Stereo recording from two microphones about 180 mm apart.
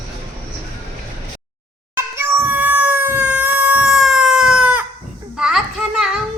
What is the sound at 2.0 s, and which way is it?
Cat, 15° right (ahead or behind).